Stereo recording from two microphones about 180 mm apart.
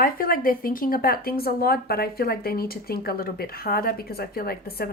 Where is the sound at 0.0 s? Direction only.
55° left (ahead or behind).